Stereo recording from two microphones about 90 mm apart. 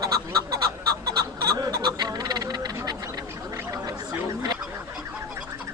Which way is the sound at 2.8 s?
45° right (ahead or behind).